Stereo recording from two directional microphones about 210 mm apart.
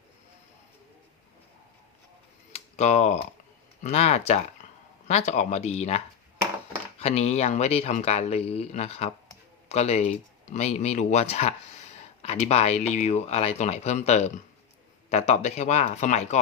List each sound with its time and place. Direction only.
2.5 s a sound: 35° left (ahead or behind)
3.8 s speech: 30° left (ahead or behind)
7.0 s speech: 30° left (ahead or behind)